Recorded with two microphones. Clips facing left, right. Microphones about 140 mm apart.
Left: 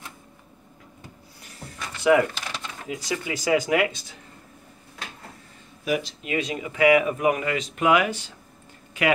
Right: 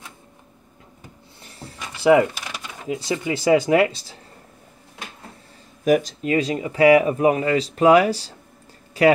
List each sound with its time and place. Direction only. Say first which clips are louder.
1.8 s a sound: left 1 dB; 15° right (ahead or behind)
2.9 s speech: right 5 dB; 25° right (ahead or behind)
5.9 s speech: right 8 dB; 45° right (ahead or behind)